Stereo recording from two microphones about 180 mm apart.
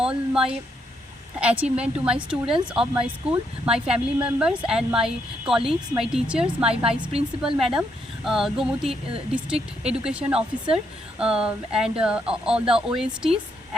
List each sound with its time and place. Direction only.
0.0 s a sound: 5° right (ahead or behind)
1.4 s a woman's voice: 5° right (ahead or behind)
7.1 s a woman's voice: 35° right (ahead or behind)
7.7 s a woman's voice: centre (ahead or behind)